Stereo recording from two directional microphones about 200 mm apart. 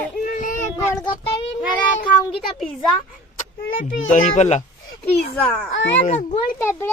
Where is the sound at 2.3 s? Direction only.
Centre (ahead or behind).